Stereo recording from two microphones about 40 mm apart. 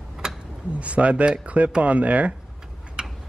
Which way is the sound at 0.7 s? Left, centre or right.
Right.